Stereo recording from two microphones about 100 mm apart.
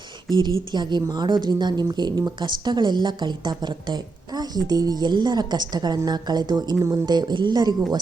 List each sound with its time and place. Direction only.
0.3 s speech: 45° right (ahead or behind)
6.7 s speech: 30° right (ahead or behind)
7.0 s speech: 45° right (ahead or behind)